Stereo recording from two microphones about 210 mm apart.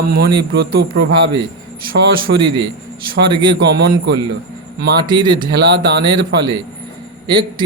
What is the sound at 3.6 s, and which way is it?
Speech, 55° right (ahead or behind).